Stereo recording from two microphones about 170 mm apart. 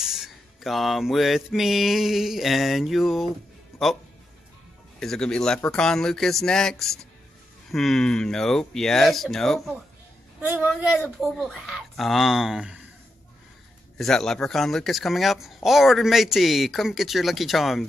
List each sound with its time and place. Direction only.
0.0 s speech: 5° right (ahead or behind)
5.0 s speech: 5° left (ahead or behind)
10.4 s speech: 10° right (ahead or behind)
13.9 s speech: 5° left (ahead or behind)